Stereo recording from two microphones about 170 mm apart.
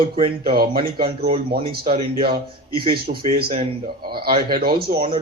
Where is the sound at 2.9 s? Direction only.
65° right (ahead or behind).